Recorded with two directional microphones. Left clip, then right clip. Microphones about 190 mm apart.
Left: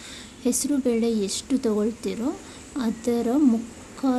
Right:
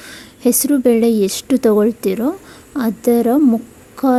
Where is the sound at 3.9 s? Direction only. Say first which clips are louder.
Right 10 dB; 40° right (ahead or behind).